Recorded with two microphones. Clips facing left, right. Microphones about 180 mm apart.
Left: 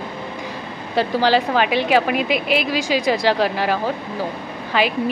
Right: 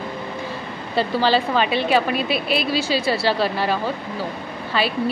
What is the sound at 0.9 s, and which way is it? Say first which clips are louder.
A woman's voice: left 2 dB; 15° left (ahead or behind).